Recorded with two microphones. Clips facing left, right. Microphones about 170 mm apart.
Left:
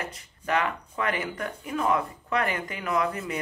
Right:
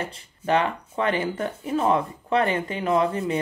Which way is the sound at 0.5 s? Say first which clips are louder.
Right 4 dB; 30° right (ahead or behind).